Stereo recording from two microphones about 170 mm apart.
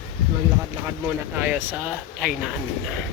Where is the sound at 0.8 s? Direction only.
10° right (ahead or behind).